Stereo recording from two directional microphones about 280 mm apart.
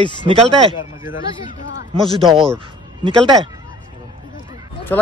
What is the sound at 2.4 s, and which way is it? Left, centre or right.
Speech, centre.